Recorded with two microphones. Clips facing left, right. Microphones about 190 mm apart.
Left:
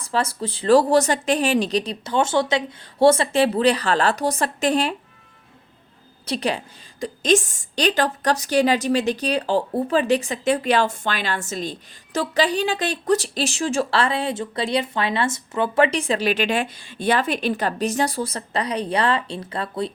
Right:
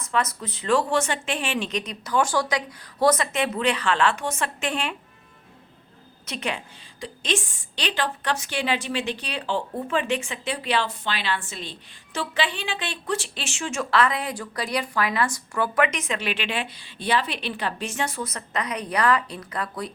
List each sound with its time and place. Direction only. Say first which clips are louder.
0.0 s a woman's voice: left 3 dB; 30° left (ahead or behind)
6.2 s a woman's voice: left 6 dB; 35° left (ahead or behind)